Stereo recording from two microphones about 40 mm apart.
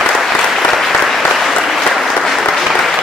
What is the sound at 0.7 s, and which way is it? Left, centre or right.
Applause, centre.